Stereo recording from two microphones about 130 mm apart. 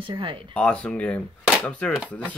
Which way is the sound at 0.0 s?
40° right (ahead or behind).